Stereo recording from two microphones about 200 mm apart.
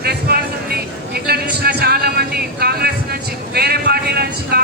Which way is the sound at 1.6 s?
50° right (ahead or behind).